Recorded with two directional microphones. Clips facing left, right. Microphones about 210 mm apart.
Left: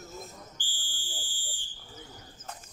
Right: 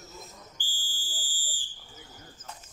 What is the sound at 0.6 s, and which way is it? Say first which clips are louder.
Fire alarm: even; 40° right (ahead or behind).